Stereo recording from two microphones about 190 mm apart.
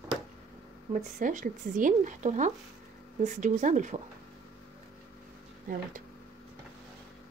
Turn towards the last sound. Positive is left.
turn(degrees=-45)  # may be behind; listen again after turning